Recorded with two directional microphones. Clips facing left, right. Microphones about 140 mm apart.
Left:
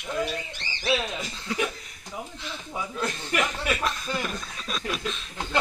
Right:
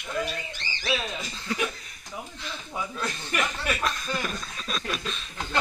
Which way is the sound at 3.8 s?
15° left (ahead or behind).